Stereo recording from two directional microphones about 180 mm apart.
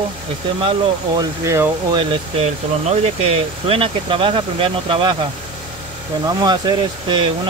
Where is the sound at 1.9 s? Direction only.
30° right (ahead or behind).